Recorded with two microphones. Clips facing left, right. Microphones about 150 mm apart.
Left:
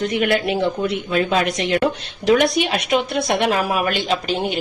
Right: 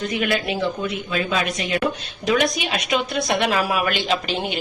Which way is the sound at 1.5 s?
70° left (ahead or behind).